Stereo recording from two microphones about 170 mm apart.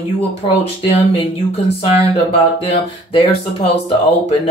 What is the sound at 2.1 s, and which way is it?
Speech, 35° left (ahead or behind).